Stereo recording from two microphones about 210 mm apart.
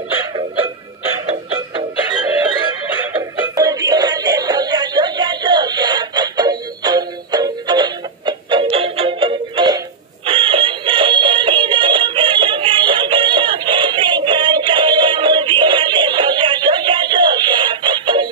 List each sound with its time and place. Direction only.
3.2 s music: 15° right (ahead or behind)
10.2 s synthetic singing: 25° right (ahead or behind)